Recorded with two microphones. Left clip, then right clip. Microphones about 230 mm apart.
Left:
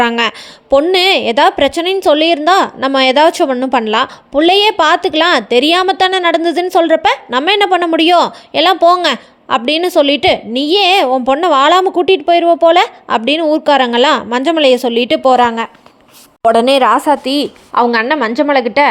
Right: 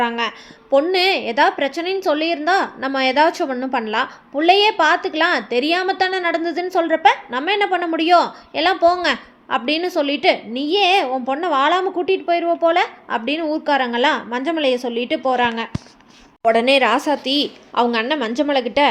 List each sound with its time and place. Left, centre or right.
0.0 s a woman's voice: left; by 18.9 s centre